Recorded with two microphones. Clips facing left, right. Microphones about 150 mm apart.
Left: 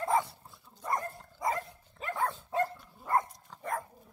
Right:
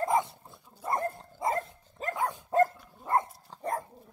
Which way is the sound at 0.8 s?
25° right (ahead or behind).